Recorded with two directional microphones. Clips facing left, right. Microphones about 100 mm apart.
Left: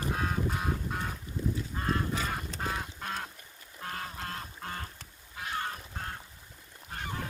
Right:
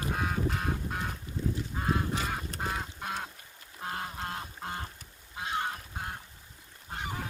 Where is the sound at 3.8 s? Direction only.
25° right (ahead or behind).